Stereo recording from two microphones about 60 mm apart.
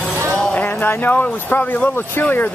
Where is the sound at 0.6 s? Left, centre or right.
Left.